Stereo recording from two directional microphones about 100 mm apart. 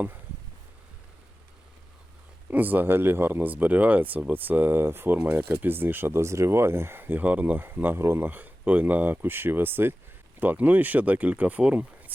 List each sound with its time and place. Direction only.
2.5 s speech: 15° right (ahead or behind)